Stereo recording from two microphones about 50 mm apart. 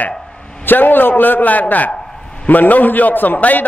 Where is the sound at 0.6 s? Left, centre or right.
Left.